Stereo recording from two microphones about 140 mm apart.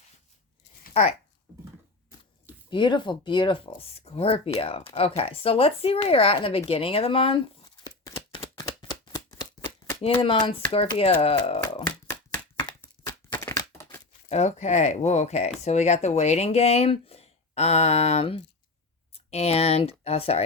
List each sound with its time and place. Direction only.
0.9 s speech: 50° left (ahead or behind)
2.6 s speech: 35° left (ahead or behind)
3.8 s speech: 45° left (ahead or behind)
7.6 s tearing: 25° left (ahead or behind)
8.3 s a sound: 35° left (ahead or behind)
10.1 s speech: 35° left (ahead or behind)
11.8 s a sound: 15° left (ahead or behind)
14.3 s speech: 50° left (ahead or behind)